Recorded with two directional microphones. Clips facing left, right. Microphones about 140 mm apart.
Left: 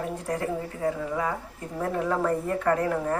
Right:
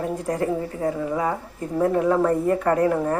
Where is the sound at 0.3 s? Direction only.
10° right (ahead or behind).